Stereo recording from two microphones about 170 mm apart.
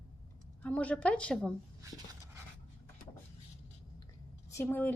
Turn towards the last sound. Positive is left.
turn(degrees=10)  # may be behind; listen again after turning